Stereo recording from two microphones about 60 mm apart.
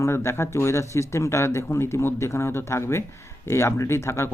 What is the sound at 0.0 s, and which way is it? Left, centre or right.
Speech, left.